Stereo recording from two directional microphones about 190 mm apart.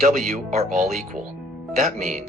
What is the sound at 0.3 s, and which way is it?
Speech, 40° right (ahead or behind).